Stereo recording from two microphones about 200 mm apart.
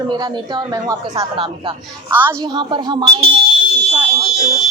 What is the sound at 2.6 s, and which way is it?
Speech, 25° right (ahead or behind).